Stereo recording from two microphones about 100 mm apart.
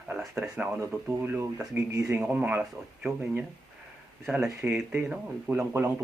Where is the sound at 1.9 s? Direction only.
30° right (ahead or behind).